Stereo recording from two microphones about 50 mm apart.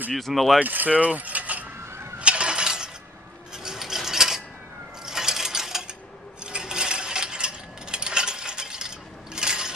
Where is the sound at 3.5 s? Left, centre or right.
Centre.